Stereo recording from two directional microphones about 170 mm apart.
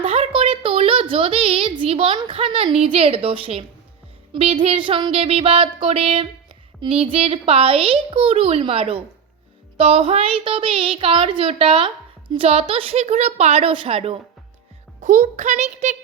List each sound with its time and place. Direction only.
0.0 s a woman's voice: 35° right (ahead or behind)
15.0 s a child's voice: 45° right (ahead or behind)